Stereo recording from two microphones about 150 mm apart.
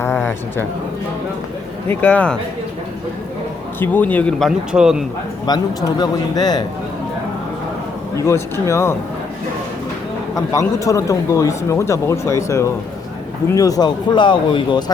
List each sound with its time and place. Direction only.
0.0 s a sound: 15° left (ahead or behind)
1.9 s speech: 10° left (ahead or behind)
3.8 s speech: 10° left (ahead or behind); by 5.0 s 5° right (ahead or behind)
5.5 s a man's voice: 25° left (ahead or behind)
8.1 s a man's voice: 20° left (ahead or behind)
10.3 s a man's voice: 20° left (ahead or behind)